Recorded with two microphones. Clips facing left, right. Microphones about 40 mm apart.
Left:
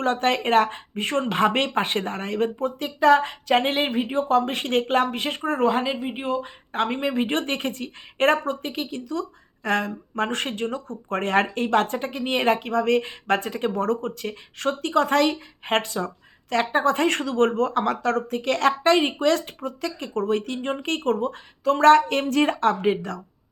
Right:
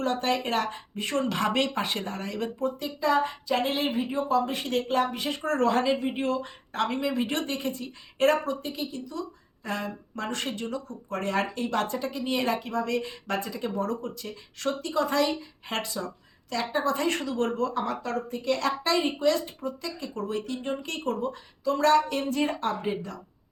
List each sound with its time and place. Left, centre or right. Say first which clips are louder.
0.0 s speech: left 5 dB; left
5.4 s speech: left 2 dB; left
6.7 s speech: left 3 dB; left